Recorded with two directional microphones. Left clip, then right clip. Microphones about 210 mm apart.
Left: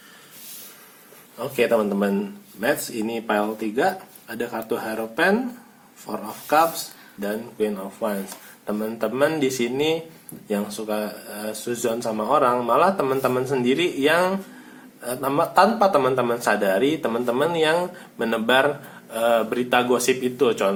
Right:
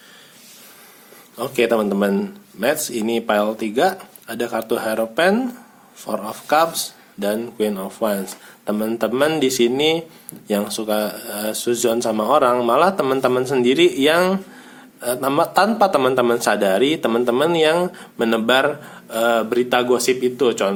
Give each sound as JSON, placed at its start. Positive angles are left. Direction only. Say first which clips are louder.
{"t": 1.4, "sound": "speech", "louder": "right 2 dB", "side_deg": -35}